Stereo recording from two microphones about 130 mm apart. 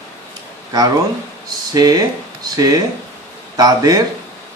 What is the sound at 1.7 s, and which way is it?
Speech, 30° right (ahead or behind).